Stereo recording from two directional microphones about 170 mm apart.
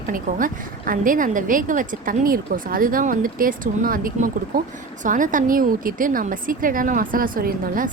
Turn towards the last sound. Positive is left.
turn(degrees=-55)  # may be behind; listen again after turning